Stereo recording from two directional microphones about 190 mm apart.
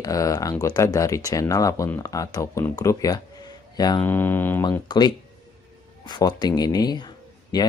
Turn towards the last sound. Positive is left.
turn(degrees=20)  # may be behind; listen again after turning